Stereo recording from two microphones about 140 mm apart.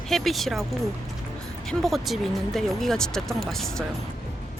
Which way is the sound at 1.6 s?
Centre (ahead or behind).